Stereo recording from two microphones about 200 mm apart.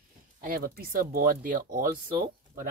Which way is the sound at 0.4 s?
45° right (ahead or behind).